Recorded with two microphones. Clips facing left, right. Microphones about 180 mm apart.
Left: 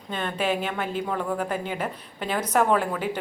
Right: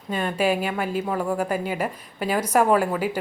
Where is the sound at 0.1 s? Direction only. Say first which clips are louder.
Right 4 dB; 10° right (ahead or behind).